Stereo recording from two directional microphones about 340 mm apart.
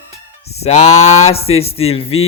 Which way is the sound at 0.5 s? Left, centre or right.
Centre.